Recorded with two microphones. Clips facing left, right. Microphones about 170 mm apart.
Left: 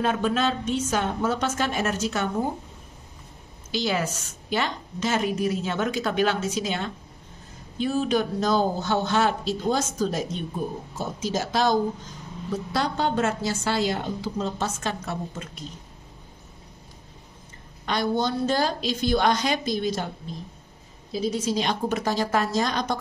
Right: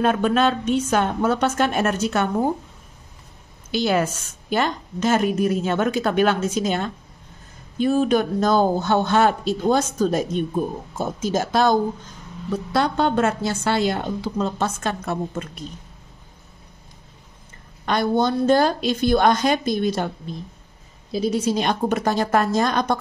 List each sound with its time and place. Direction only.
0.0 s a woman's voice: 60° right (ahead or behind)
3.7 s a woman's voice: 55° right (ahead or behind)
17.8 s a woman's voice: 55° right (ahead or behind)
21.3 s a woman's voice: 60° right (ahead or behind)